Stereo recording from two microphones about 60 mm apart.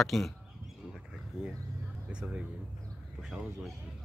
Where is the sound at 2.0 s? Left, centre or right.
Right.